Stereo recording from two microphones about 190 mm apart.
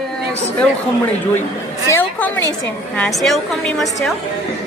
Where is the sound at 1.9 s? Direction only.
10° left (ahead or behind).